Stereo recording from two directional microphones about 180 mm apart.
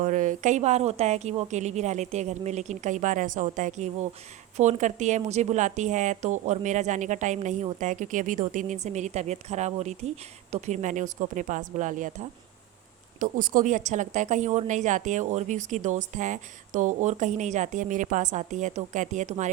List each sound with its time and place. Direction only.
0.0 s a woman's voice: 45° right (ahead or behind)
13.1 s a woman's voice: 50° right (ahead or behind)